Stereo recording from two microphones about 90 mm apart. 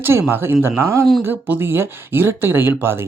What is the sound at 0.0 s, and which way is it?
Speech, 30° right (ahead or behind).